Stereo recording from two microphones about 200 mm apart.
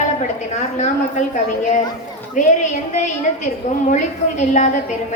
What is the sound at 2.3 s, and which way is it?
A woman's voice, 35° left (ahead or behind).